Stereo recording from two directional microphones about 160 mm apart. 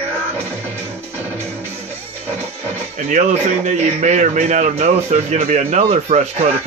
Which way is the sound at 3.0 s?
45° right (ahead or behind).